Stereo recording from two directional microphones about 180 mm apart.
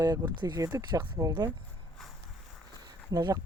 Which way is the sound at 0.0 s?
20° right (ahead or behind).